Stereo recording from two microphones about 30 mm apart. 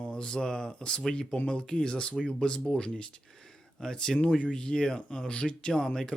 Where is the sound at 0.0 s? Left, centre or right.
Left.